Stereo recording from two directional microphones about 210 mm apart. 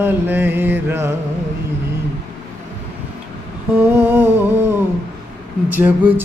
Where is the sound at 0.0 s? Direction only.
10° right (ahead or behind).